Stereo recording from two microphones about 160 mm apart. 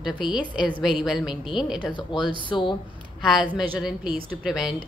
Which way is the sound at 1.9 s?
30° left (ahead or behind).